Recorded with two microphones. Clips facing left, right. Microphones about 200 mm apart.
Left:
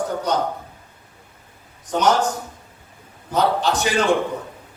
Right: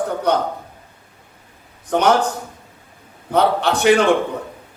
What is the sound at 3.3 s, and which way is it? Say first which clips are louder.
Speech: right 3 dB; 60° right (ahead or behind).